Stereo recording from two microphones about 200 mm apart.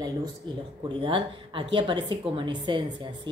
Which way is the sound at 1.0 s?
25° right (ahead or behind).